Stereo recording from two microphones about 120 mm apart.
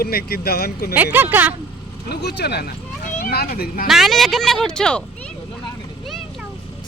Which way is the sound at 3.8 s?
Centre (ahead or behind).